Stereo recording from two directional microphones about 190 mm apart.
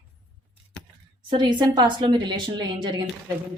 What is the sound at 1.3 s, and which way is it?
A woman's voice, 25° right (ahead or behind).